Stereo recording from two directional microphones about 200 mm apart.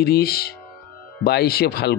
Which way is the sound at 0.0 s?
50° left (ahead or behind).